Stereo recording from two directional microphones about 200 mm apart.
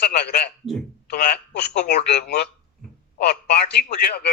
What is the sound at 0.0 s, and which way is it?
Speech, 55° left (ahead or behind).